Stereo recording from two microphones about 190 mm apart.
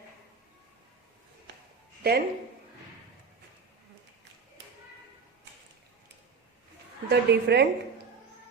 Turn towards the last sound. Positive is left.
turn(degrees=-60)  # may be behind; listen again after turning